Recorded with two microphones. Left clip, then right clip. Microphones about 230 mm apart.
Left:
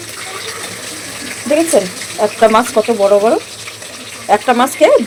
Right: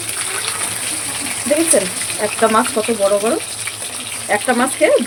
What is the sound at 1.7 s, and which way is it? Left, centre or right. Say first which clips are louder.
Speech: left 4 dB; centre.